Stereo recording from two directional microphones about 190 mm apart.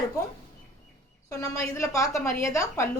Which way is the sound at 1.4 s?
15° left (ahead or behind).